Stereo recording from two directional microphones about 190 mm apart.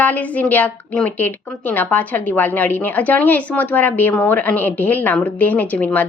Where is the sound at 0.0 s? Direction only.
10° left (ahead or behind).